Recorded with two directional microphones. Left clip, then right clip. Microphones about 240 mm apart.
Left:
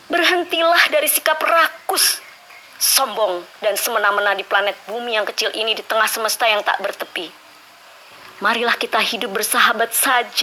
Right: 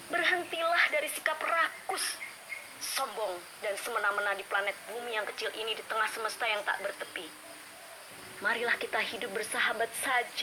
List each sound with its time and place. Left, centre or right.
0.1 s a woman's voice: left
8.4 s a woman's voice: left